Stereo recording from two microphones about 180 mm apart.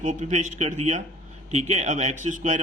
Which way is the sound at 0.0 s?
40° right (ahead or behind).